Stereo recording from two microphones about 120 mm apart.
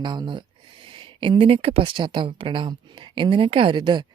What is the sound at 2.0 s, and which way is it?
Speech, 40° right (ahead or behind).